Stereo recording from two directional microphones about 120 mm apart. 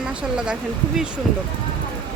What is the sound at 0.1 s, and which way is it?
Speech, 10° right (ahead or behind).